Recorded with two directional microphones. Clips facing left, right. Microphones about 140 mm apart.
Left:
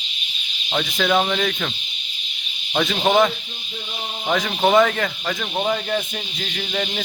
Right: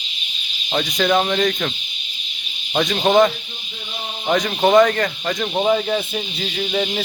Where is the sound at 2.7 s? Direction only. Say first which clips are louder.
Right 2 dB; centre (ahead or behind).